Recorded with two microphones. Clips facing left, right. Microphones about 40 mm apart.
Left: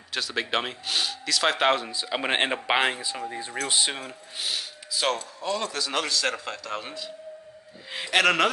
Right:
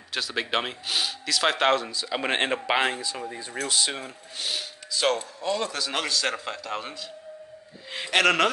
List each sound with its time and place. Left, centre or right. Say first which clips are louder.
0.1 s speech: even; centre
1.8 s speech: even; centre
4.0 s a man's voice: even; centre